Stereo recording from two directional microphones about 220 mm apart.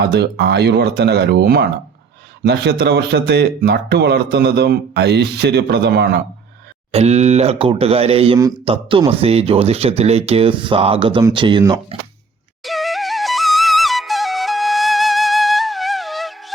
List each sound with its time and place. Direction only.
0.0 s speech: 45° right (ahead or behind)
6.9 s speech: 30° right (ahead or behind)
12.6 s flute: centre (ahead or behind)